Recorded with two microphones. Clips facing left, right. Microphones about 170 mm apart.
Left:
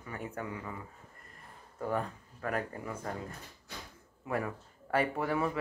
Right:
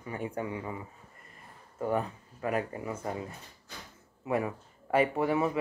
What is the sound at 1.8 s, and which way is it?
Speech, 5° right (ahead or behind).